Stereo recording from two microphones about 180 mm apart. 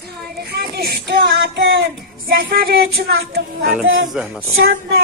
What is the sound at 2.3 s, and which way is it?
Child singing, 60° right (ahead or behind).